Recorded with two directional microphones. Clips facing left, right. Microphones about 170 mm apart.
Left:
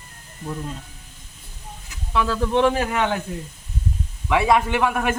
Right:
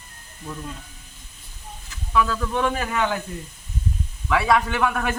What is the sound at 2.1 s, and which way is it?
Speech, 30° left (ahead or behind).